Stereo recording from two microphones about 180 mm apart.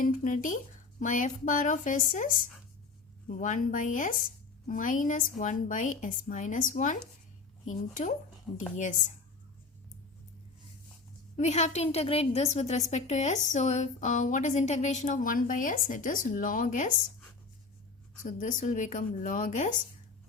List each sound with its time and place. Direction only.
0.0 s a woman's voice: 45° left (ahead or behind)
11.3 s a woman's voice: 40° left (ahead or behind)
18.2 s a woman's voice: 45° left (ahead or behind)